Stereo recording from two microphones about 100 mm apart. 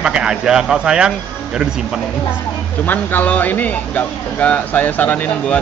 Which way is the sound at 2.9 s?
20° left (ahead or behind).